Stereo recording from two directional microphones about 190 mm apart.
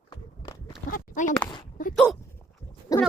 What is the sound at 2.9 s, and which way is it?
Pig, 20° left (ahead or behind).